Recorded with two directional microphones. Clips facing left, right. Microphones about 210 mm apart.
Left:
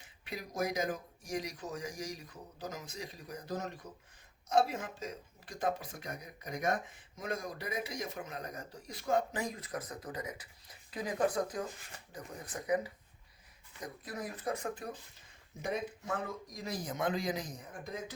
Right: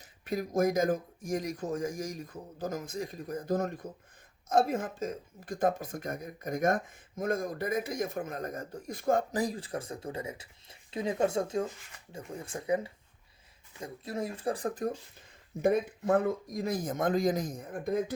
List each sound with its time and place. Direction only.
0.0 s speech: 45° right (ahead or behind)
9.3 s speech: 35° right (ahead or behind)
15.6 s speech: 55° right (ahead or behind)